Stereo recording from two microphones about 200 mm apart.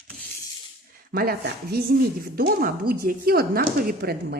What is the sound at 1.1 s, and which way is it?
Speech, 50° right (ahead or behind).